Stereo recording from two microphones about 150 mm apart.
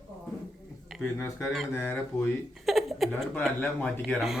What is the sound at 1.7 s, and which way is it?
Speech, 15° left (ahead or behind).